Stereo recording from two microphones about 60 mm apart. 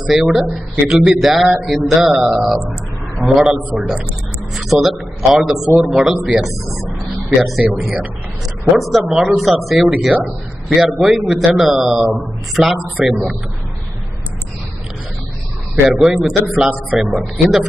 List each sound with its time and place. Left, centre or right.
0.0 s a man's voice: centre
6.8 s a sound: centre
7.7 s a man's voice: centre
9.8 s a man's voice: centre
10.8 s a man's voice: centre
15.7 s a man's voice: centre